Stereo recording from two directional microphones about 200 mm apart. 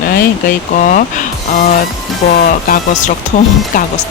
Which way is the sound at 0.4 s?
45° left (ahead or behind).